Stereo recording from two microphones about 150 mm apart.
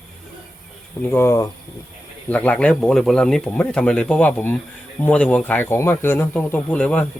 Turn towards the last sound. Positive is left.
turn(degrees=10)  # may be behind; listen again after turning